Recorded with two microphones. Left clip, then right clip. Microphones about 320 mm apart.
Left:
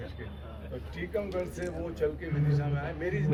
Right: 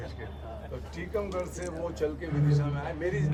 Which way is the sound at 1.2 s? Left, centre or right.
Right.